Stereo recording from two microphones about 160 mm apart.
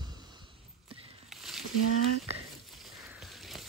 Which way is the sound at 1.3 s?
Centre (ahead or behind).